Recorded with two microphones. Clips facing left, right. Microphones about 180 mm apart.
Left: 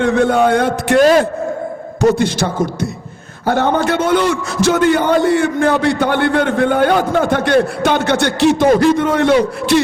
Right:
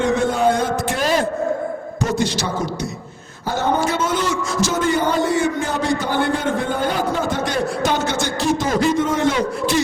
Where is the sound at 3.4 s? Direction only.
65° left (ahead or behind).